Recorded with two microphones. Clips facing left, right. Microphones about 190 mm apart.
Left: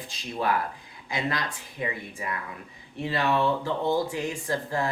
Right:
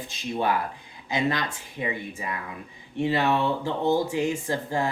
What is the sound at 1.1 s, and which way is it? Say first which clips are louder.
Speech: right 4 dB; 25° right (ahead or behind).